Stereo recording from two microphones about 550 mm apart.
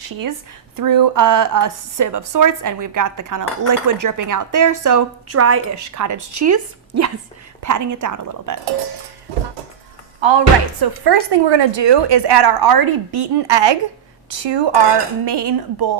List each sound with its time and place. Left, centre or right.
0.0 s a woman's voice: right
10.2 s speech: right